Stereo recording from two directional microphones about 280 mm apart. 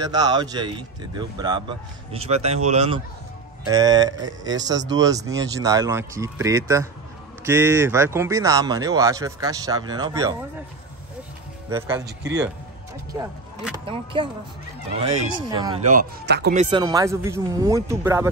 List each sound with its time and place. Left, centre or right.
0.0 s speech: centre
13.8 s speech: centre; by 16.5 s right
16.5 s speech: centre